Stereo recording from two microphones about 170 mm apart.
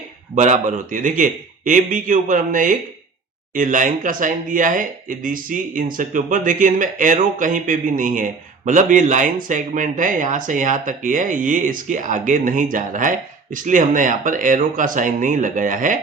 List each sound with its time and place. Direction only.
0.3 s speech: 45° right (ahead or behind)